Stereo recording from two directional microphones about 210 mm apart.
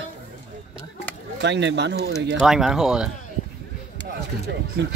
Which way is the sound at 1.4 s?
55° right (ahead or behind).